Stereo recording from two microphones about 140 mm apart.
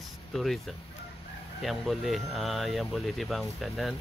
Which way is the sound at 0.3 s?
Centre (ahead or behind).